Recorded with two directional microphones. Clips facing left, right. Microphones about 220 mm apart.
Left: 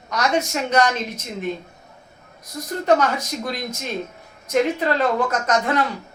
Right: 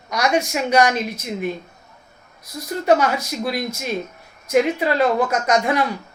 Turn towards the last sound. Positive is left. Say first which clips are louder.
# right 2 dB
turn(degrees=-10)  # may be behind; listen again after turning